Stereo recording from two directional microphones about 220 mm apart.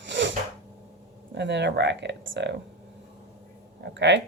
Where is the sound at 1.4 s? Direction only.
50° right (ahead or behind).